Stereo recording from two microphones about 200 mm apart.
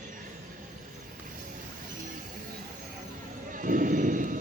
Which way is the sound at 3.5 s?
40° right (ahead or behind).